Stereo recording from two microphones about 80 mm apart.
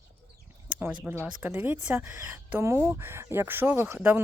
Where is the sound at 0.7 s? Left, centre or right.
Centre.